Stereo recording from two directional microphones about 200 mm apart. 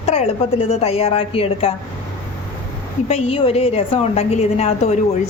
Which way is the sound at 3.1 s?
30° left (ahead or behind).